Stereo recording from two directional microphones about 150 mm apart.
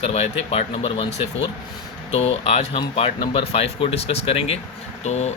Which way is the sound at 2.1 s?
45° left (ahead or behind).